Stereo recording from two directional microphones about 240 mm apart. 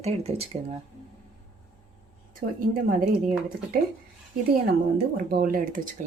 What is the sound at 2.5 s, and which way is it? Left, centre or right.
Speech, right.